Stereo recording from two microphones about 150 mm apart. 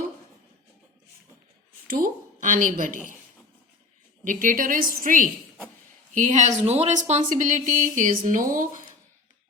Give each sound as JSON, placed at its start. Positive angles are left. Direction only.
{"t": 1.9, "sound": "speech", "side_deg": -65}
{"t": 4.2, "sound": "speech", "side_deg": -60}